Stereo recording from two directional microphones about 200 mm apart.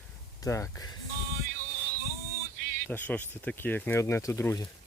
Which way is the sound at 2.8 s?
10° left (ahead or behind).